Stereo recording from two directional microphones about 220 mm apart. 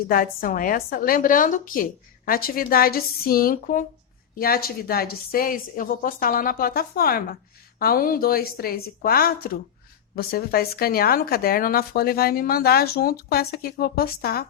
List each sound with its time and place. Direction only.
0.1 s a woman's voice: 40° left (ahead or behind)